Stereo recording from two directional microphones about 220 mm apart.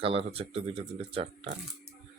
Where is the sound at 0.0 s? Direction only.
25° right (ahead or behind).